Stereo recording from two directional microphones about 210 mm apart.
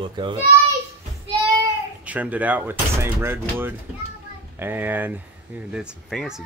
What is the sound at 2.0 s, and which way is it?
Speech, 5° right (ahead or behind).